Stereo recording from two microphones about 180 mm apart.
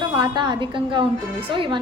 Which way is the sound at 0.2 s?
25° right (ahead or behind).